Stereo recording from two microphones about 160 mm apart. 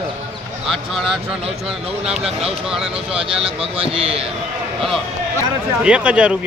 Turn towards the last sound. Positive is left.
turn(degrees=-5)  # may be behind; listen again after turning